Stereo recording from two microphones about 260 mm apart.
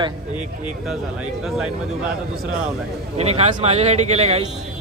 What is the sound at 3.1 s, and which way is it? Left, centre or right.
A man's voice, right.